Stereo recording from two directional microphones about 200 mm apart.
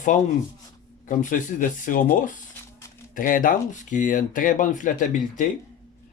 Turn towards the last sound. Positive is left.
turn(degrees=40)  # may be behind; listen again after turning